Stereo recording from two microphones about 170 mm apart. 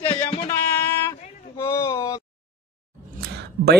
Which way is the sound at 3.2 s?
75° right (ahead or behind).